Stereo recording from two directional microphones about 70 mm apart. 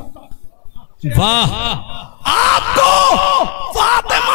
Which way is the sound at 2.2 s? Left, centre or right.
Left.